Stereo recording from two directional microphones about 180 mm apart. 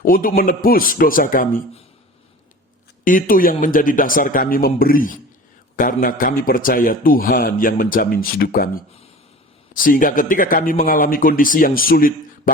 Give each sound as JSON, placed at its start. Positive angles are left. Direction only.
{"t": 0.0, "sound": "a man's voice", "side_deg": 50}
{"t": 3.0, "sound": "a man's voice", "side_deg": 50}